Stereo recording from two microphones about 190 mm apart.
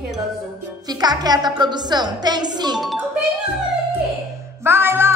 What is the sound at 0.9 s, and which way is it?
A woman's voice, 20° right (ahead or behind).